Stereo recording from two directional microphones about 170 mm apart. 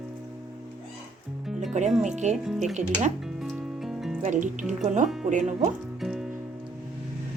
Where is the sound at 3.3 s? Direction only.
Centre (ahead or behind).